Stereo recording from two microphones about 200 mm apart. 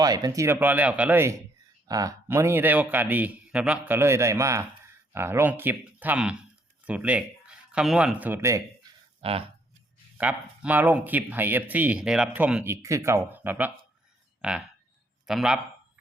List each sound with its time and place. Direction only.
0.0 s speech: 20° right (ahead or behind)
9.2 s speech: 30° right (ahead or behind)
10.2 s speech: 10° right (ahead or behind)